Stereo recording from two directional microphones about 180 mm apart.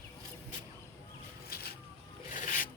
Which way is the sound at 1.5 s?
60° left (ahead or behind).